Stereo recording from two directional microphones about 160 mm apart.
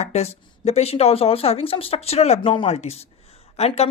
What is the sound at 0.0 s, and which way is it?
Speech, 40° left (ahead or behind).